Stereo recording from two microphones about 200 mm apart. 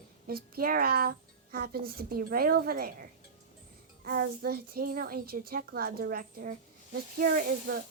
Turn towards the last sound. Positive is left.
turn(degrees=-50)  # may be behind; listen again after turning